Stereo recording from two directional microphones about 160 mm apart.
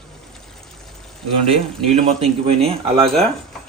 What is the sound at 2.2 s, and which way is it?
Speech, 35° right (ahead or behind).